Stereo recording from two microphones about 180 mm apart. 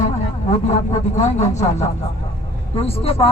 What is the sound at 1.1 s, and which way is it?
Speech, 40° left (ahead or behind).